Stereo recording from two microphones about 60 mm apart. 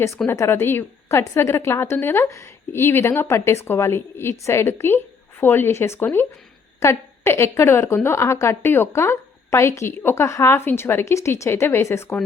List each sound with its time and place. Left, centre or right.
0.2 s a woman's voice: centre
0.5 s a woman's voice: left
1.1 s a woman's voice: left
8.9 s a woman's voice: left